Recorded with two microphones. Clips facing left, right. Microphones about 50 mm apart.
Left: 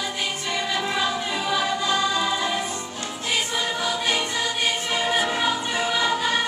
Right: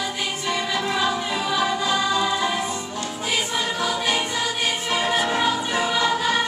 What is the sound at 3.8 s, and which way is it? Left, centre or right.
Choir, centre.